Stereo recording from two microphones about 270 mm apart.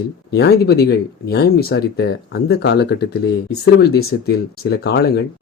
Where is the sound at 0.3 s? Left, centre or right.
Left.